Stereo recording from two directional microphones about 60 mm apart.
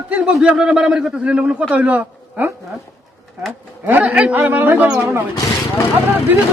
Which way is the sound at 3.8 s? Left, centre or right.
Right.